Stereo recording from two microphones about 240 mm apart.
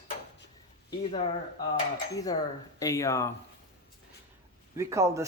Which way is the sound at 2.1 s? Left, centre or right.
Centre.